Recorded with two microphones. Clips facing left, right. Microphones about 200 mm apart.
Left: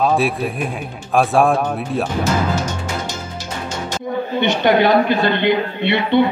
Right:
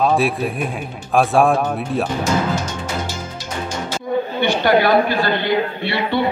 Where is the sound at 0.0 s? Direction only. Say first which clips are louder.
Even; centre (ahead or behind).